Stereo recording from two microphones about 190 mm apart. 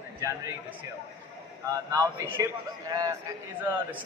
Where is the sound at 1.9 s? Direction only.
20° right (ahead or behind).